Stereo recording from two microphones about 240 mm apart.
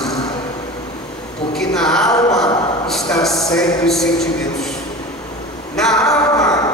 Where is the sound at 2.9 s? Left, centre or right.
Centre.